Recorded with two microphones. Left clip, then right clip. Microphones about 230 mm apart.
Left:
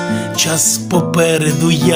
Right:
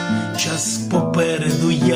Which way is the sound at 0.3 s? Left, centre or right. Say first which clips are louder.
Left 7 dB; left.